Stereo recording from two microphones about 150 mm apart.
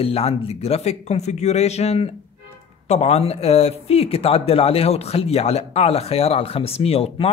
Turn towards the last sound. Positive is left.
turn(degrees=40)  # may be behind; listen again after turning